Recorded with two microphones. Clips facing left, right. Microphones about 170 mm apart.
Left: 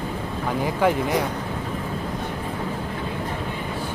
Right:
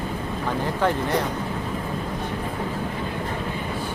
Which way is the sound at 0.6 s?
10° left (ahead or behind).